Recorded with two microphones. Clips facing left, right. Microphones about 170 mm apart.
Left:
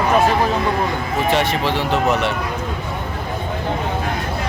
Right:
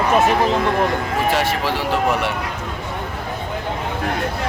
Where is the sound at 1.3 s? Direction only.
5° right (ahead or behind).